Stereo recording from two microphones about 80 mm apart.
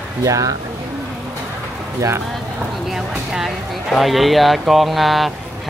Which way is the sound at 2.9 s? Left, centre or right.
Centre.